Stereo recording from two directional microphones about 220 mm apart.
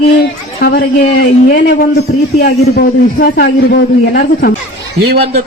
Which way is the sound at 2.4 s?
40° left (ahead or behind).